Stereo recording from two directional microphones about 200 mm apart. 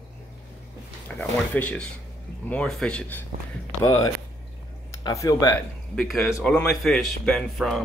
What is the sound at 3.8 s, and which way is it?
Speech, 15° left (ahead or behind).